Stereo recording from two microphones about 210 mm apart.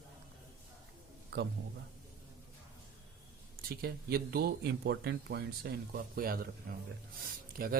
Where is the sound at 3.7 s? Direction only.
45° right (ahead or behind).